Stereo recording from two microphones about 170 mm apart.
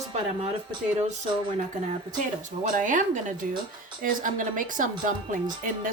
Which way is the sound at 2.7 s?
50° right (ahead or behind).